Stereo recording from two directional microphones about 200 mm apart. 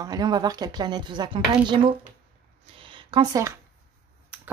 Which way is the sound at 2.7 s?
25° right (ahead or behind).